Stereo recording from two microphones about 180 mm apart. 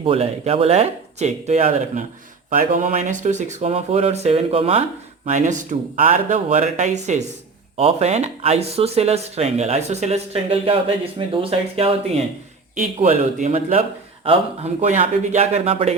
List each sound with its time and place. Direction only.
0.0 s speech: 35° right (ahead or behind)
13.0 s speech: 45° right (ahead or behind)